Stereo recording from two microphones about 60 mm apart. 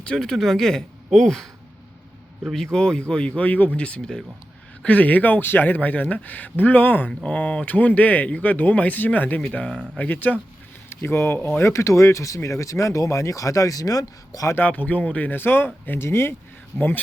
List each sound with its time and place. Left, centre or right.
0.0 s speech: centre
2.7 s speech: centre; by 7.1 s left
7.1 s speech: centre
10.8 s speech: left
11.3 s speech: left
11.6 s speech: left
14.7 s speech: left